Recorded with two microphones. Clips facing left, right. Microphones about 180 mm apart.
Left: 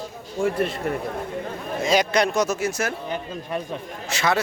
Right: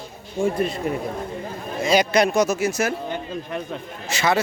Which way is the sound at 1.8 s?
Centre (ahead or behind).